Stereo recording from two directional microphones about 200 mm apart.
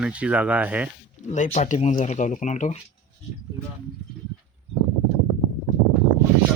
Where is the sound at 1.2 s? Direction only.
35° left (ahead or behind).